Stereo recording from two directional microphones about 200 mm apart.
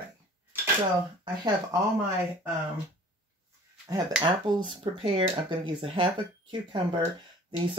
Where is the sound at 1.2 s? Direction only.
20° right (ahead or behind).